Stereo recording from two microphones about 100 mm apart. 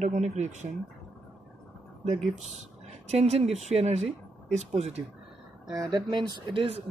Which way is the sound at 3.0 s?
90° right.